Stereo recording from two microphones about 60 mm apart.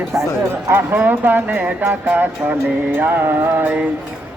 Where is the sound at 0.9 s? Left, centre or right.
Right.